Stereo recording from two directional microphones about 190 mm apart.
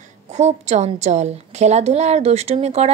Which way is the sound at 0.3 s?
35° right (ahead or behind).